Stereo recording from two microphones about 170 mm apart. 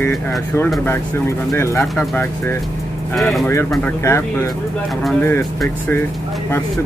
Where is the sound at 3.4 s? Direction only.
10° left (ahead or behind).